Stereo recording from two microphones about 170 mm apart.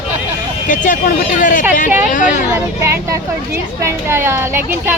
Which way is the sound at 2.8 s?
15° right (ahead or behind).